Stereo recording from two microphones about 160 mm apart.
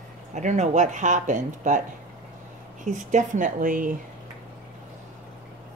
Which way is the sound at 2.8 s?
50° right (ahead or behind).